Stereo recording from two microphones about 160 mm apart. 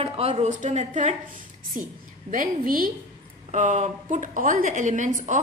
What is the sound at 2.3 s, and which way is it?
Speech, 60° right (ahead or behind).